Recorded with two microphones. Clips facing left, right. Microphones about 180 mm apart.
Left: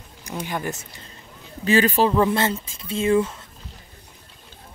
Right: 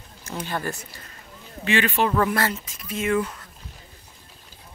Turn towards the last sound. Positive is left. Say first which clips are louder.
# left 4 dB
turn(degrees=25)  # may be behind; listen again after turning